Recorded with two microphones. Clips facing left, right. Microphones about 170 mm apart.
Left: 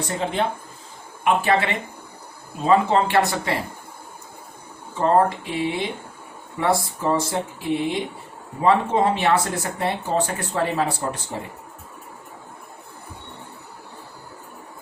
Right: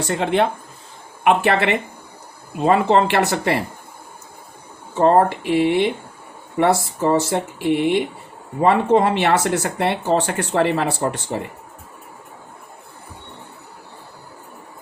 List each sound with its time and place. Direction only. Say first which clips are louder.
0.1 s speech: right 6 dB; 70° right (ahead or behind)
4.9 s speech: right 4 dB; 80° right